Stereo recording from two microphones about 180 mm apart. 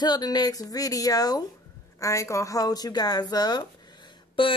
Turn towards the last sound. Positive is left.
turn(degrees=25)  # may be behind; listen again after turning